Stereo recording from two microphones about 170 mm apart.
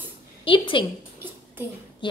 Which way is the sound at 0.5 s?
30° left (ahead or behind).